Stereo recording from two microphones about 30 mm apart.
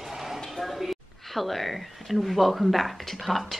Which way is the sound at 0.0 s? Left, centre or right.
Centre.